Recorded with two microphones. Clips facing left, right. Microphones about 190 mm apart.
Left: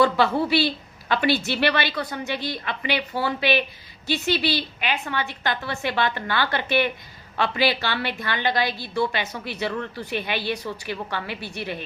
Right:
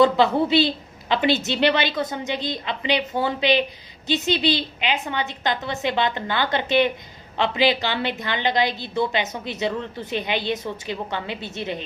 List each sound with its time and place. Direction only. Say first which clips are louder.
0.0 s a woman's voice: right 3 dB; 20° right (ahead or behind)